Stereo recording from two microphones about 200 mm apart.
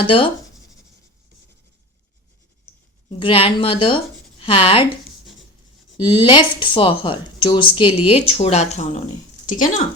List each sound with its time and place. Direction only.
3.2 s speech: 25° left (ahead or behind)
6.0 s speech: 25° left (ahead or behind); by 9.8 s 40° left (ahead or behind)